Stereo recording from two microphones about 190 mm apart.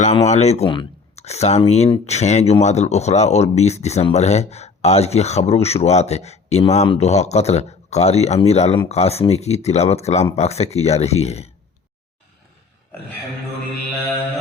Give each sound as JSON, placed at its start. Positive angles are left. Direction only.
{"t": 0.3, "sound": "speech", "side_deg": 35}